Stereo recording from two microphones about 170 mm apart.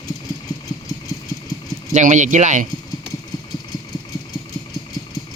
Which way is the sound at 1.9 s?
45° right (ahead or behind).